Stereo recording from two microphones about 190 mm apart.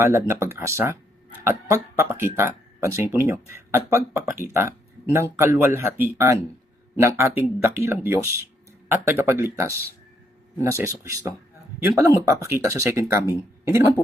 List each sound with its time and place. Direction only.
0.0 s speech: 15° right (ahead or behind)